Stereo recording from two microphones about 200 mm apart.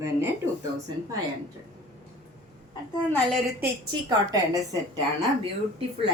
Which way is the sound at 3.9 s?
20° right (ahead or behind).